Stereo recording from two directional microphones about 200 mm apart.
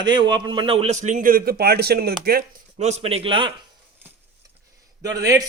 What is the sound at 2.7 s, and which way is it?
Speech, 35° right (ahead or behind).